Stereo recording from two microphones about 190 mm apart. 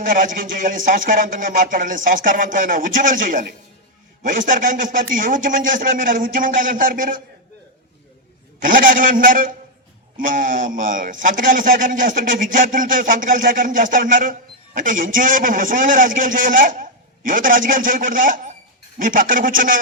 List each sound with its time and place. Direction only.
0.0 s speech: 45° right (ahead or behind)
8.5 s speech: 45° right (ahead or behind)